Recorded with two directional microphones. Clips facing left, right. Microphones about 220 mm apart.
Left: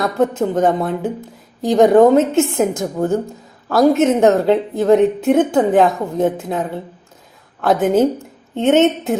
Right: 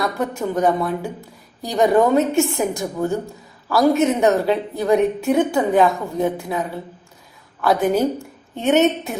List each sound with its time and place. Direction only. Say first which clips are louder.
0.0 s a woman's voice: left 6 dB; 20° left (ahead or behind)